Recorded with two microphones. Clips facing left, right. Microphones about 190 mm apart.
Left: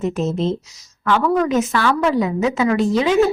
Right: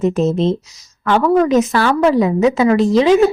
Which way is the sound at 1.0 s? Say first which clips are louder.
Right 4 dB; 40° right (ahead or behind).